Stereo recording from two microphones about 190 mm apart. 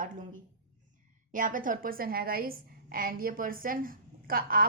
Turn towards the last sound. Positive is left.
turn(degrees=-50)  # may be behind; listen again after turning